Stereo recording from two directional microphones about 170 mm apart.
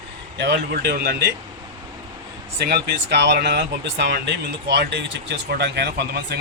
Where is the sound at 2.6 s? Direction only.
70° right (ahead or behind).